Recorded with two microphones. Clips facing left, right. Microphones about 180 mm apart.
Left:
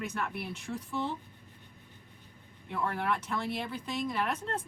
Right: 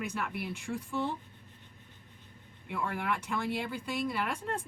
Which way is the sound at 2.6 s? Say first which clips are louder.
Left 2 dB; 15° right (ahead or behind).